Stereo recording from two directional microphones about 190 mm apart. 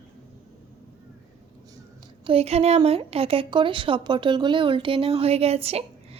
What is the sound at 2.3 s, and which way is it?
A woman's voice, 35° right (ahead or behind).